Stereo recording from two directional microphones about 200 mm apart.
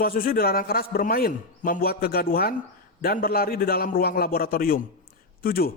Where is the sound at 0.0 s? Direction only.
45° left (ahead or behind).